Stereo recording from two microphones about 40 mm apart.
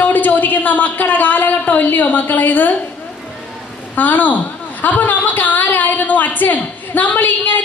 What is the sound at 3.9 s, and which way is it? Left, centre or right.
A woman's voice, left.